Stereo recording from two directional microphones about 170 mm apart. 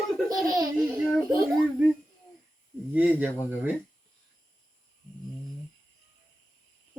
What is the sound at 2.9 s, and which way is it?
Speech, 10° right (ahead or behind).